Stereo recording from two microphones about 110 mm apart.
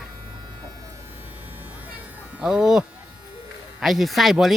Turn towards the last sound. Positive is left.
turn(degrees=0)  # may be behind; listen again after turning